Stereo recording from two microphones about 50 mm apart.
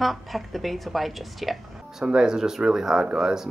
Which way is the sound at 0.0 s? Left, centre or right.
Centre.